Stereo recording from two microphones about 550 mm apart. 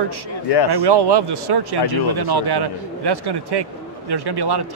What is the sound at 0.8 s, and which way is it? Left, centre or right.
Speech, right.